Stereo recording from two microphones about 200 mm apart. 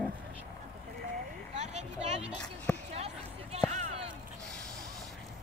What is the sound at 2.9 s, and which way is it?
Basketball bounce, 30° right (ahead or behind).